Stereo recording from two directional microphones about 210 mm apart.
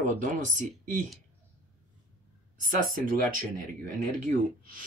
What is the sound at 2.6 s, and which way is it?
Speech, 40° right (ahead or behind).